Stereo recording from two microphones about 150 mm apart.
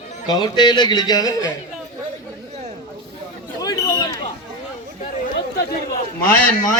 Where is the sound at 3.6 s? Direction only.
25° left (ahead or behind).